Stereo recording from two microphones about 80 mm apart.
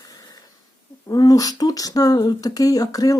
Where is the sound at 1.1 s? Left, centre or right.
Left.